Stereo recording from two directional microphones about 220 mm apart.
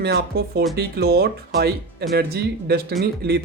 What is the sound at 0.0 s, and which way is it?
Speech, 45° right (ahead or behind).